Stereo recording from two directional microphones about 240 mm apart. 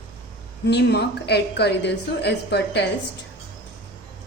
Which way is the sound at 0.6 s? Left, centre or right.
Left.